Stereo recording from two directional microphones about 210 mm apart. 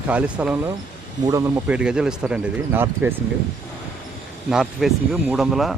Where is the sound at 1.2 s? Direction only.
15° right (ahead or behind).